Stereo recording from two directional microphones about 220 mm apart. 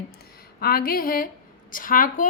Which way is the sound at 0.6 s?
40° left (ahead or behind).